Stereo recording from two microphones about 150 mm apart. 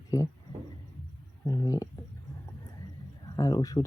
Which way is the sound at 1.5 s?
20° left (ahead or behind).